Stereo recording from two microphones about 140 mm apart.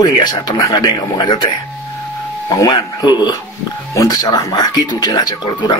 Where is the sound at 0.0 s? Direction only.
30° left (ahead or behind).